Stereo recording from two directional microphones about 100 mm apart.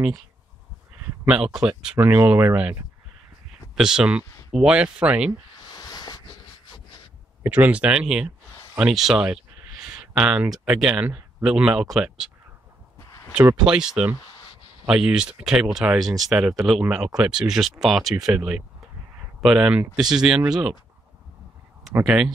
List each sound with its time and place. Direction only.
1.2 s speech: 10° right (ahead or behind)
2.0 s speech: 20° right (ahead or behind)
3.7 s speech: 5° right (ahead or behind)
5.7 s a sound: 40° left (ahead or behind)
7.4 s speech: 15° right (ahead or behind)
13.7 s speech: 10° right (ahead or behind)
22.0 s speech: 5° right (ahead or behind)